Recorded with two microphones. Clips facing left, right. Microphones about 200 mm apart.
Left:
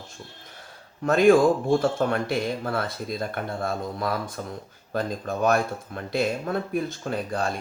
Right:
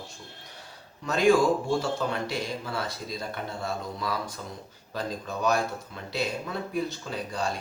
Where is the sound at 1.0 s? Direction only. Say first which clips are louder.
Left 4 dB; 55° left (ahead or behind).